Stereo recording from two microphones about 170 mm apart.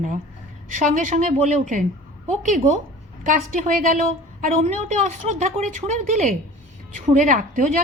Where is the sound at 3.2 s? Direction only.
50° right (ahead or behind).